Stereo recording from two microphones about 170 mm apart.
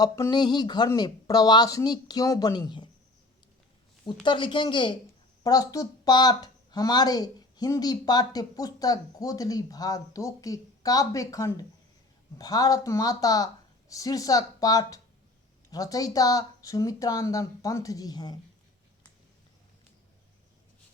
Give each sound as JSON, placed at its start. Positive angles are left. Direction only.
{"t": 0.0, "sound": "speech", "side_deg": 25}
{"t": 4.0, "sound": "speech", "side_deg": 25}